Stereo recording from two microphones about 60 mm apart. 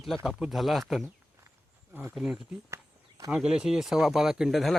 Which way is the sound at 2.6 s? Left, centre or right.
Right.